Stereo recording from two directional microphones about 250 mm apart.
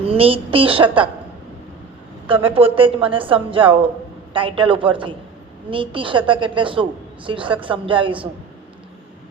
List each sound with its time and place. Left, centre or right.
0.0 s a woman's voice: right
2.5 s speech: right